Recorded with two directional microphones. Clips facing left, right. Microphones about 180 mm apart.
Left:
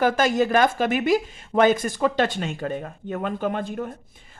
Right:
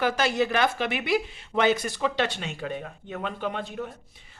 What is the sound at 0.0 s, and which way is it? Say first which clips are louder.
Speech: left 4 dB; 45° left (ahead or behind).